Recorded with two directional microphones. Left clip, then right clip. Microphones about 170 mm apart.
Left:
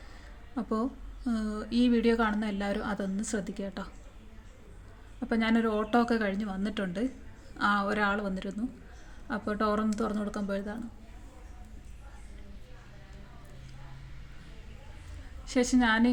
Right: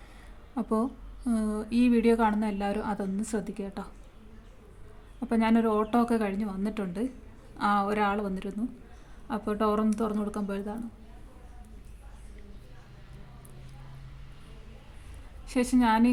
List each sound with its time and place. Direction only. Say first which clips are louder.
0.5 s a woman's voice: right 3 dB; 25° right (ahead or behind)
5.2 s a woman's voice: right 2 dB; 20° right (ahead or behind)
15.4 s a woman's voice: right 1 dB; 20° right (ahead or behind)